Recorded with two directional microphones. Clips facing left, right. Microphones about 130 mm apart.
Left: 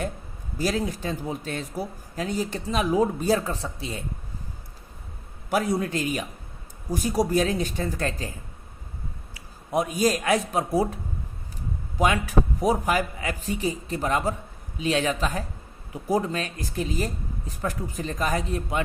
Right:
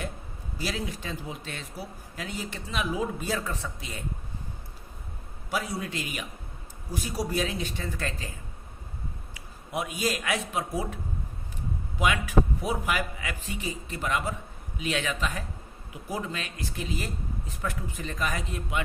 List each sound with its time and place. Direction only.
0.6 s speech: 40° left (ahead or behind)
5.5 s a man's voice: 55° left (ahead or behind); by 18.8 s 35° left (ahead or behind)